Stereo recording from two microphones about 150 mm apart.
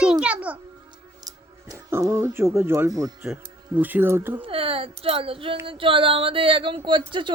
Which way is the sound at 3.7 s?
10° right (ahead or behind).